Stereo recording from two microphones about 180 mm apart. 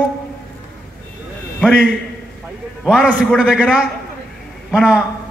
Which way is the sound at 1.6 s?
5° left (ahead or behind).